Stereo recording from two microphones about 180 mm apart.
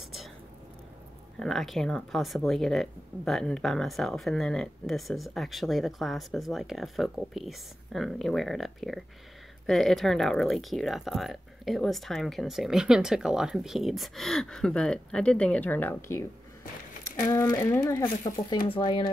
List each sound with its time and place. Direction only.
1.4 s speech: centre (ahead or behind)
17.3 s speech: 15° left (ahead or behind)